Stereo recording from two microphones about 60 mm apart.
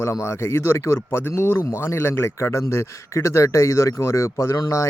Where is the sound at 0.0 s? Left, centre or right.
Left.